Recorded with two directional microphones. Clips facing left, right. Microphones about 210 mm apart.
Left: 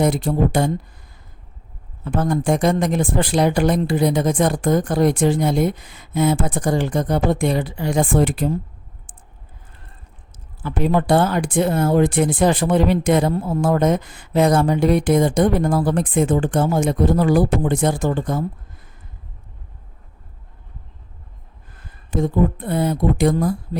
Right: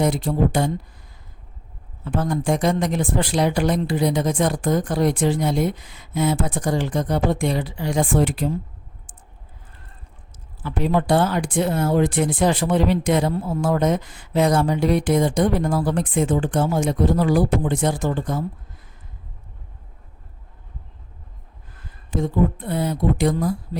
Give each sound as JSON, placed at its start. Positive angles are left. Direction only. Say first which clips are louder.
{"t": 0.0, "sound": "speech", "louder": "left 2 dB", "side_deg": 50}
{"t": 2.0, "sound": "speech", "louder": "left 3 dB", "side_deg": 50}
{"t": 10.6, "sound": "speech", "louder": "left 2 dB", "side_deg": 50}
{"t": 22.1, "sound": "speech", "louder": "left 2 dB", "side_deg": 50}